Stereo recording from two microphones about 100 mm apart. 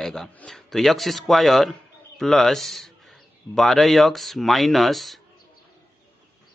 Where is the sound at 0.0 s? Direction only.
5° left (ahead or behind).